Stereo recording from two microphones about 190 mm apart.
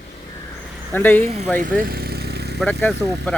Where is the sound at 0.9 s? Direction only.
10° left (ahead or behind).